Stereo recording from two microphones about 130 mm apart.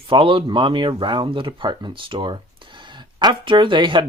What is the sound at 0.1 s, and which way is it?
Speech, 40° right (ahead or behind).